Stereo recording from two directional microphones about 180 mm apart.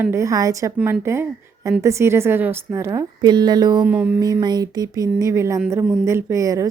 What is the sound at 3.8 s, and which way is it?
Speech, 5° right (ahead or behind).